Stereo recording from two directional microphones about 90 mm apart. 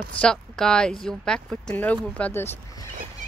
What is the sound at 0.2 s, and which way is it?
Speech, 10° left (ahead or behind).